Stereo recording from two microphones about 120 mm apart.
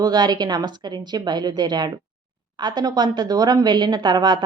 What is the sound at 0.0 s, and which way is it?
A woman's voice, 35° right (ahead or behind).